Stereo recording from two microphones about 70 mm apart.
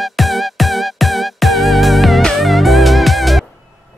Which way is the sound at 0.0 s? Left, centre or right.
Centre.